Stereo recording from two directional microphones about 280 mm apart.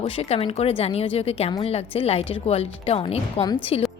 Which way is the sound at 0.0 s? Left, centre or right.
Left.